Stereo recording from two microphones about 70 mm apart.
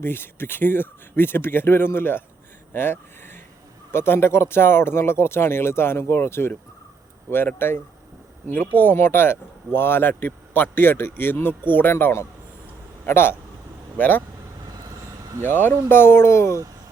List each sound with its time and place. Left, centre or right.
0.0 s speech: left
15.4 s speech: left